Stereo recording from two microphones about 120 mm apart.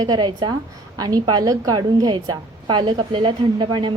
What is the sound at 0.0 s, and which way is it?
Speech, 35° right (ahead or behind).